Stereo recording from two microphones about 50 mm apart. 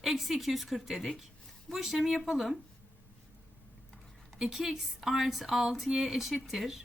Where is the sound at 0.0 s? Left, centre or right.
Centre.